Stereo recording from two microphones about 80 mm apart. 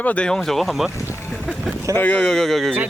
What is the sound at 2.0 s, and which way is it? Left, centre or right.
Speech, centre.